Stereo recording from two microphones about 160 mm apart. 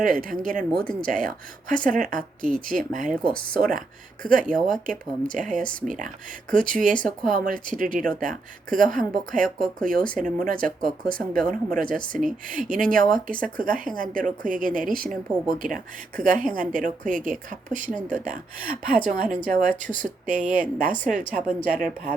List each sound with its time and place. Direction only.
0.0 s a woman's voice: 60° right (ahead or behind)